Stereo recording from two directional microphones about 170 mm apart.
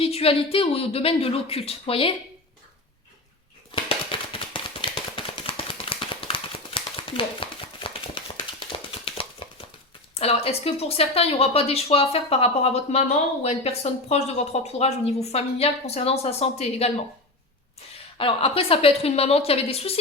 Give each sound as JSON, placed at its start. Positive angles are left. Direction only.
{"t": 0.0, "sound": "speech", "side_deg": 35}
{"t": 3.8, "sound": "a sound", "side_deg": 30}
{"t": 10.2, "sound": "speech", "side_deg": 35}
{"t": 18.2, "sound": "speech", "side_deg": 35}